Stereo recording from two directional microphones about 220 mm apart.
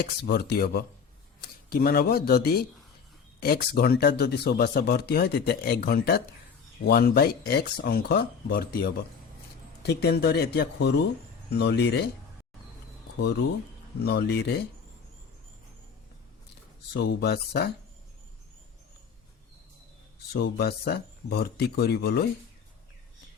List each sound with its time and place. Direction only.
0.0 s speech: 45° left (ahead or behind)
14.0 s speech: 45° left (ahead or behind)
16.9 s speech: 50° left (ahead or behind)
20.3 s speech: 45° left (ahead or behind)